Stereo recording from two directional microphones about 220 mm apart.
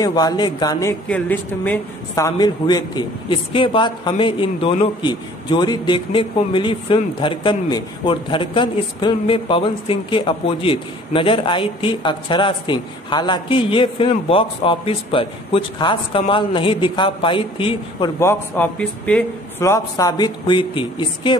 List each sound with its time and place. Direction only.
0.0 s speech: 15° left (ahead or behind)
18.2 s a man's voice: 10° left (ahead or behind)